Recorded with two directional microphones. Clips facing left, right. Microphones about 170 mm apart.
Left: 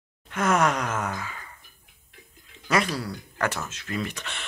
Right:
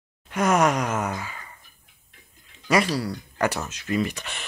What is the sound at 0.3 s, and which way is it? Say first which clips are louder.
Groan: right 2 dB; 15° right (ahead or behind).